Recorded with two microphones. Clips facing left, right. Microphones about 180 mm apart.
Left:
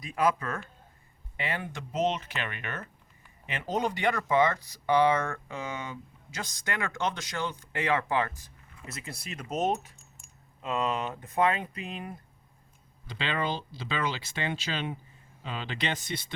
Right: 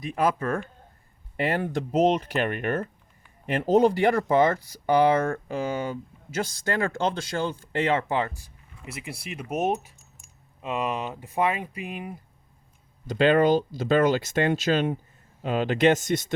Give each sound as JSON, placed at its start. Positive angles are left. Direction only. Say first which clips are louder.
{"t": 0.2, "sound": "speech", "louder": "right 2 dB", "side_deg": -30}
{"t": 0.4, "sound": "speech", "louder": "right 8 dB", "side_deg": -50}
{"t": 13.1, "sound": "speech", "louder": "right 13 dB", "side_deg": -45}